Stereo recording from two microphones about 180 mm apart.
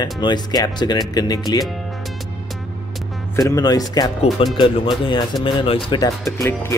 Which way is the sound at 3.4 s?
20° left (ahead or behind).